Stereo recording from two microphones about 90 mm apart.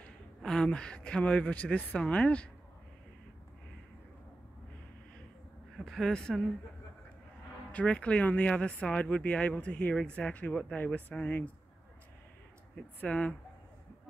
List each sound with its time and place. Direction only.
0.4 s speech: 10° left (ahead or behind)
5.8 s a woman's voice: 5° left (ahead or behind)
7.7 s speech: 15° left (ahead or behind)
13.0 s speech: 15° left (ahead or behind)